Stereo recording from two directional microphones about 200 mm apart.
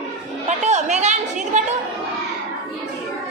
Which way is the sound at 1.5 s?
35° right (ahead or behind).